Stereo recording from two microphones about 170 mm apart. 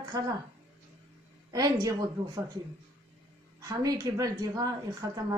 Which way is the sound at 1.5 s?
20° right (ahead or behind).